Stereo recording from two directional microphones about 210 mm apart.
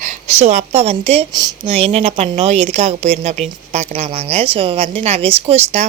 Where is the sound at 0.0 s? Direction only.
35° right (ahead or behind).